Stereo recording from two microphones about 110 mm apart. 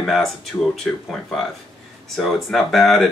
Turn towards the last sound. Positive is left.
turn(degrees=0)  # may be behind; listen again after turning